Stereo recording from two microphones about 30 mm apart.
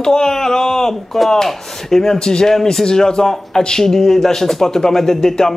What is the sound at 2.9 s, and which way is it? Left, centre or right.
Speech, left.